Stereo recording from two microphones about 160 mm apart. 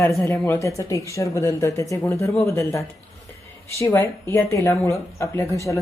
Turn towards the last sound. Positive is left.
turn(degrees=20)  # may be behind; listen again after turning